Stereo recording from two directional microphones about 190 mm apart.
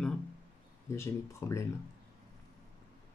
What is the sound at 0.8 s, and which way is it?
Speech, 15° left (ahead or behind).